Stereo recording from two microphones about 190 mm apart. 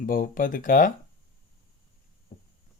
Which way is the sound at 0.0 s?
45° left (ahead or behind).